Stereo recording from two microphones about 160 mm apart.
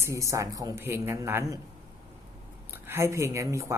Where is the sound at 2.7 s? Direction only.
15° right (ahead or behind).